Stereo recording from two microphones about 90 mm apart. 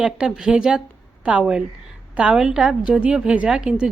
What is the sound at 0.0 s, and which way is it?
Speech, 10° right (ahead or behind).